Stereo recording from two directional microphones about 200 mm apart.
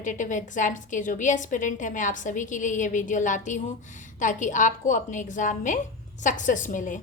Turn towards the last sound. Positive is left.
turn(degrees=40)  # may be behind; listen again after turning